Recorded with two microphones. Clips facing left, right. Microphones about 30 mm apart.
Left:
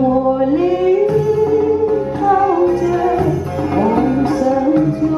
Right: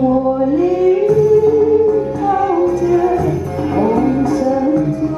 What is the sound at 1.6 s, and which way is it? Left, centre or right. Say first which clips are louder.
Music: right 2 dB; centre.